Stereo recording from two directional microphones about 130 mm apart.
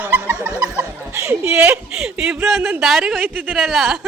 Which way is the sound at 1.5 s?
10° right (ahead or behind).